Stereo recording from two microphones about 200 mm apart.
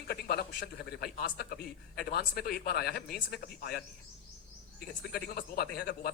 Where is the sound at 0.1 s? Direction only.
50° left (ahead or behind).